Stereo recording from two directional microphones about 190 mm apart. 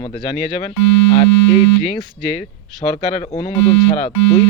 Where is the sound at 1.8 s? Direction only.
30° left (ahead or behind).